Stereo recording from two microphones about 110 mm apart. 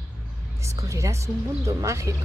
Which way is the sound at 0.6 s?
30° right (ahead or behind).